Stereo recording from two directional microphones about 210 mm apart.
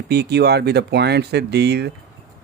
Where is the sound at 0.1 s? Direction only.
50° right (ahead or behind).